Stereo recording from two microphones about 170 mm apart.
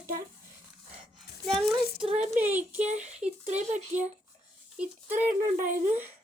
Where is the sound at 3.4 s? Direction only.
40° right (ahead or behind).